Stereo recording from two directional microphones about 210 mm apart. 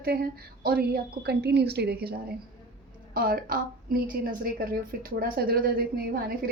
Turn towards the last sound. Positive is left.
turn(degrees=-45)  # may be behind; listen again after turning